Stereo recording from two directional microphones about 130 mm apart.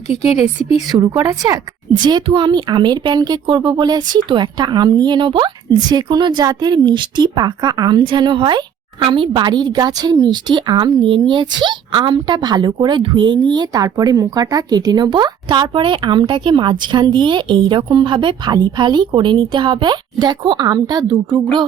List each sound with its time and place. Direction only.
0.9 s a woman's voice: 35° right (ahead or behind)